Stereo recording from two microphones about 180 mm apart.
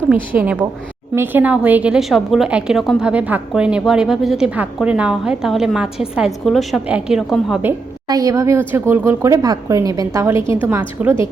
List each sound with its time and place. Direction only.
0.1 s speech: 10° right (ahead or behind)
8.0 s speech: 20° right (ahead or behind)